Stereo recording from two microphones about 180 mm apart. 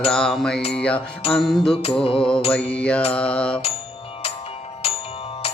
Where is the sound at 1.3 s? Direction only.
Centre (ahead or behind).